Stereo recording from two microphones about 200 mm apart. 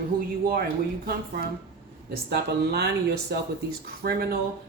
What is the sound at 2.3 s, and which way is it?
Speech, 55° right (ahead or behind).